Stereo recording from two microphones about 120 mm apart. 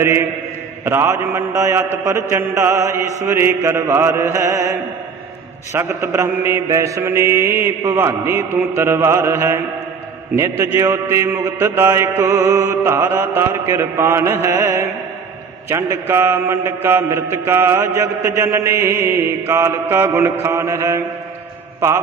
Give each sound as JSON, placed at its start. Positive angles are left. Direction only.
{"t": 0.0, "sound": "mantra", "side_deg": -20}